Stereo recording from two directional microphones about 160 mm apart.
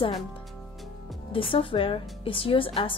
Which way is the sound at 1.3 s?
35° left (ahead or behind).